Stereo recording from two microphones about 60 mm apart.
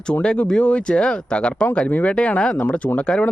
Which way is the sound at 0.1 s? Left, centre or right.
Centre.